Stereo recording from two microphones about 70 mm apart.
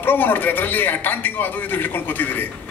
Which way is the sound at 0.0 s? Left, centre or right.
Left.